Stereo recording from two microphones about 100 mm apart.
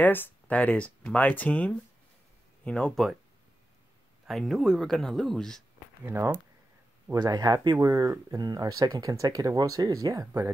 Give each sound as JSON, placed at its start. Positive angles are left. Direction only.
{"t": 0.0, "sound": "speech", "side_deg": 20}
{"t": 4.3, "sound": "speech", "side_deg": 0}
{"t": 6.0, "sound": "speech", "side_deg": -25}
{"t": 7.1, "sound": "speech", "side_deg": -40}
{"t": 7.7, "sound": "speech", "side_deg": -30}